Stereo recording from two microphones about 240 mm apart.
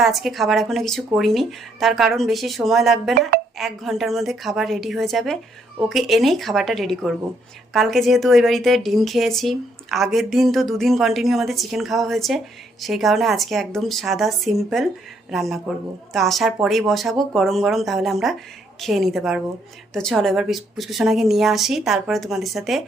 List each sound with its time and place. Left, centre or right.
0.0 s a woman's voice: centre
3.2 s speech: right
3.6 s a woman's voice: centre